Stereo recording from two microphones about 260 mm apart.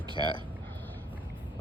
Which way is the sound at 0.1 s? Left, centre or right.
Centre.